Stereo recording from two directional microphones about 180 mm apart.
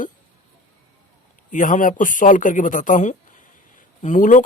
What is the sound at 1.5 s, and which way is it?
Speech, 45° left (ahead or behind).